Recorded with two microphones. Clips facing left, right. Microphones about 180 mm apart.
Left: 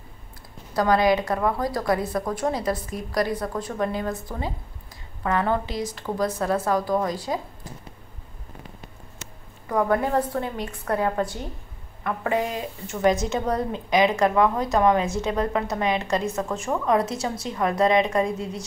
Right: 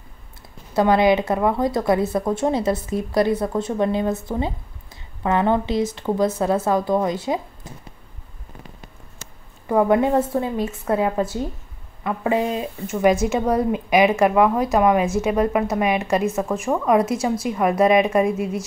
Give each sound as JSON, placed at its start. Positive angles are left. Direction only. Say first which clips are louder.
{"t": 0.7, "sound": "a woman's voice", "louder": "right 4 dB", "side_deg": -25}
{"t": 9.7, "sound": "a woman's voice", "louder": "right 5 dB", "side_deg": -25}